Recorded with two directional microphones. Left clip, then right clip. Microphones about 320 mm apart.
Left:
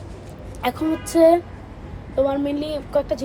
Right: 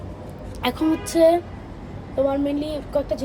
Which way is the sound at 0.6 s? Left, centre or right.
Centre.